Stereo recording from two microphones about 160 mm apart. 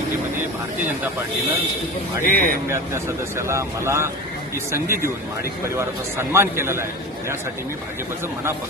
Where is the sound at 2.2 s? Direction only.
60° left (ahead or behind).